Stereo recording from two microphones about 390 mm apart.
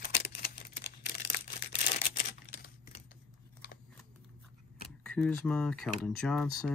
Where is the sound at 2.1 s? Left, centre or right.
Left.